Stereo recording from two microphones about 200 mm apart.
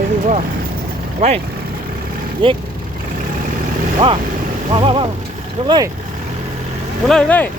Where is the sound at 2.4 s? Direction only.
25° right (ahead or behind).